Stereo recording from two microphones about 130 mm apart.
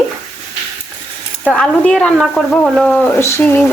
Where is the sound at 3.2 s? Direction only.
20° left (ahead or behind).